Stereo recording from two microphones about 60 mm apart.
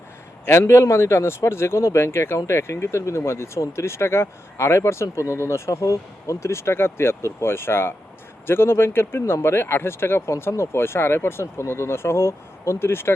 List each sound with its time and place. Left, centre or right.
0.4 s speech: left